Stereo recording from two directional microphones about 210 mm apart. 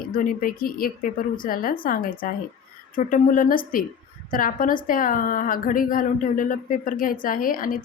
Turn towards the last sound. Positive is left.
turn(degrees=40)  # may be behind; listen again after turning